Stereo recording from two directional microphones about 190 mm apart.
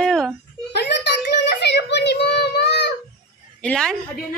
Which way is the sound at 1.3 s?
65° left (ahead or behind).